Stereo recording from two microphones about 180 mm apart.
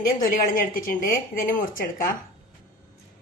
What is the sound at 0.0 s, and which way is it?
A woman's voice, 50° left (ahead or behind).